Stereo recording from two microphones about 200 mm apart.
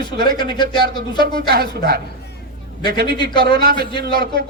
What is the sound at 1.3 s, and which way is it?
Speech, 50° right (ahead or behind).